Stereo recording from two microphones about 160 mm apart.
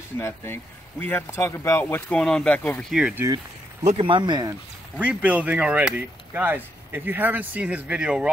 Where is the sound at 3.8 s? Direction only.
35° right (ahead or behind).